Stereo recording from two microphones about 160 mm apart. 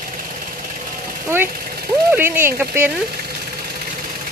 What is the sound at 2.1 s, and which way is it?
Speech, 15° right (ahead or behind).